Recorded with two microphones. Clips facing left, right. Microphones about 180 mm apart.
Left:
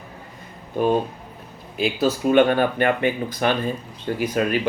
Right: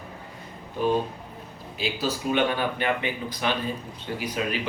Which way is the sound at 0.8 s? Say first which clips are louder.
Left 4 dB; 55° left (ahead or behind).